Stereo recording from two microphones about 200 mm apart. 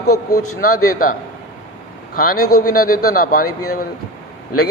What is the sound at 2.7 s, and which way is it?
A man's voice, 45° left (ahead or behind).